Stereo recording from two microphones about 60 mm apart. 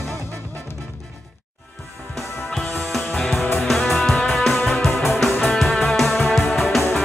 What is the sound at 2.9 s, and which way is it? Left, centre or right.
Music, centre.